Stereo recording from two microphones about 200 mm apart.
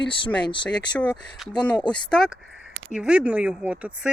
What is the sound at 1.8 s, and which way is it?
Speech, 5° left (ahead or behind).